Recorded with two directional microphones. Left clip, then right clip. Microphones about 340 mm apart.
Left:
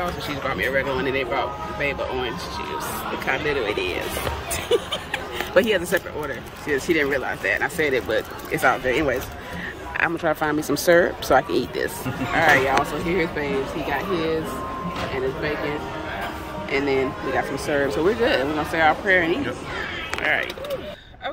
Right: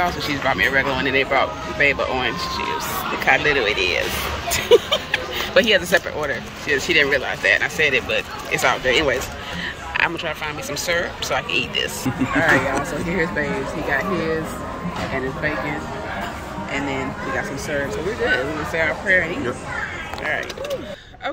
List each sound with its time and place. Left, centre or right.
0.0 s speech: centre
12.7 s speech: centre
17.7 s speech: centre